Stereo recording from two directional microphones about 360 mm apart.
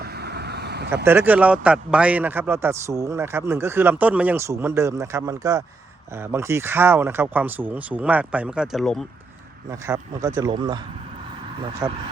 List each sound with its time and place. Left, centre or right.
0.0 s vehicle: right
1.0 s speech: centre
9.8 s speech: centre
11.8 s speech: centre